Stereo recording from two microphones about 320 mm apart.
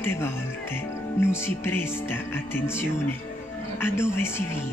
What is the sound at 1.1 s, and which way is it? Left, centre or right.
Speech, centre.